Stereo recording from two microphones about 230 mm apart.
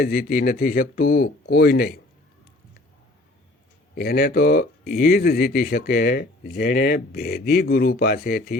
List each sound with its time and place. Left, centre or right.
0.0 s speech: left
3.9 s speech: left